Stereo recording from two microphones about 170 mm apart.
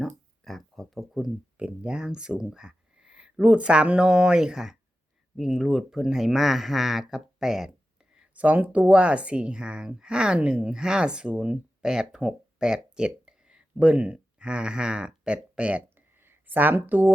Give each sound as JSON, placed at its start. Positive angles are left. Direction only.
{"t": 0.0, "sound": "speech", "side_deg": 0}